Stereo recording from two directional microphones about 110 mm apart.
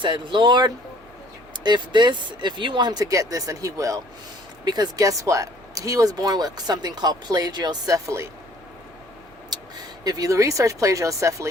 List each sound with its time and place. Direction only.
0.0 s speech: 45° right (ahead or behind); by 8.3 s 30° right (ahead or behind)
9.5 s vehicle: 40° right (ahead or behind)
10.0 s speech: 35° right (ahead or behind)